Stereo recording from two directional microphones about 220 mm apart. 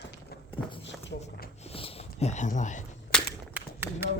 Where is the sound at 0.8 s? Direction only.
55° left (ahead or behind).